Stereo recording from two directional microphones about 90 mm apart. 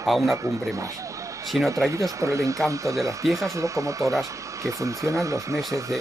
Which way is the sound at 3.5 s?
35° right (ahead or behind).